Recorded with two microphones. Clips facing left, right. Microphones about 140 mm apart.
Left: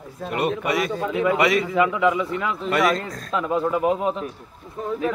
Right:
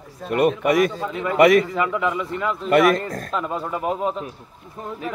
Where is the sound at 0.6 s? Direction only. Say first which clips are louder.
Right 5 dB; 50° right (ahead or behind).